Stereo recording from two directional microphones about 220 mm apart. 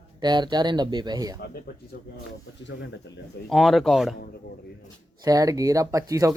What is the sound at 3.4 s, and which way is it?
Speech, centre (ahead or behind).